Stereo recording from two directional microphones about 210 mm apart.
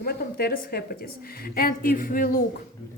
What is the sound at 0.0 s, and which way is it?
A woman's voice, 45° left (ahead or behind).